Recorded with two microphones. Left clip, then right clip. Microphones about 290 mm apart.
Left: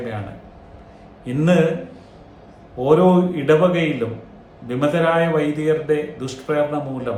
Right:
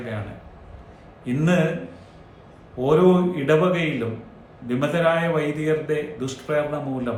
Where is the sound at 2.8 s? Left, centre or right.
Centre.